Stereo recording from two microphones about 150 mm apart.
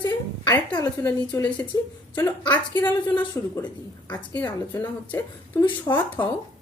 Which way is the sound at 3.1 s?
10° left (ahead or behind).